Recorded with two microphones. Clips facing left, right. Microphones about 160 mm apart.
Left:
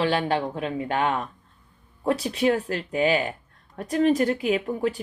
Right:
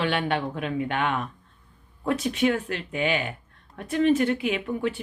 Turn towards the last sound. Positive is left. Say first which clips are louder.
# left 3 dB
turn(degrees=35)  # may be behind; listen again after turning